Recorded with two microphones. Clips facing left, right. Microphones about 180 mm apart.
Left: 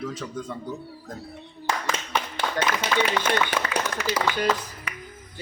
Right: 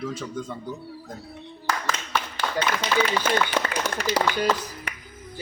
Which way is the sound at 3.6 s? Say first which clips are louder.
Even; 35° right (ahead or behind).